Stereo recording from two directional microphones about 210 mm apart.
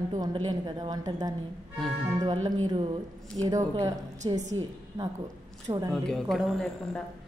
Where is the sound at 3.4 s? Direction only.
15° right (ahead or behind).